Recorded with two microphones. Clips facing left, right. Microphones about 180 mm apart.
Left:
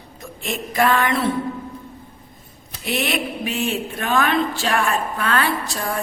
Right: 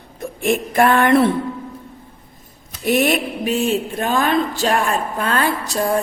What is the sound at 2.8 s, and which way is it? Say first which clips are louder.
Speech: right 6 dB; 45° right (ahead or behind).